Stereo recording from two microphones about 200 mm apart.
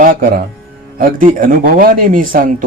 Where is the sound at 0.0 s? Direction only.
45° right (ahead or behind).